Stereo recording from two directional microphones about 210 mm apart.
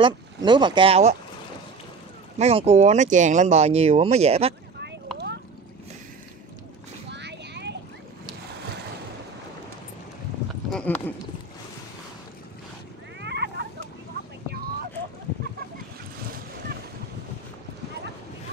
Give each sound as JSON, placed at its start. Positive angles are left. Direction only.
{"t": 0.0, "sound": "speech", "side_deg": -20}
{"t": 2.3, "sound": "speech", "side_deg": -30}
{"t": 7.1, "sound": "boat", "side_deg": -55}
{"t": 10.7, "sound": "speech", "side_deg": 5}
{"t": 13.2, "sound": "a sound", "side_deg": -55}